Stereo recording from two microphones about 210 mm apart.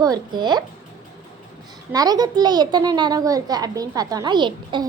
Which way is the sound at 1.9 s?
20° right (ahead or behind).